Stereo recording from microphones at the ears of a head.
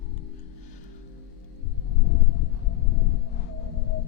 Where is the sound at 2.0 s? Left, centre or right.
Left.